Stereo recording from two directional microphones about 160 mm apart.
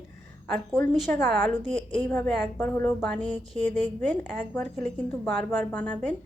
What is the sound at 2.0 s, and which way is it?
A woman's voice, 10° left (ahead or behind).